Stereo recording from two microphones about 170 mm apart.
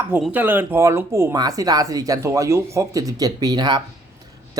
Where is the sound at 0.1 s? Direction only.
10° right (ahead or behind).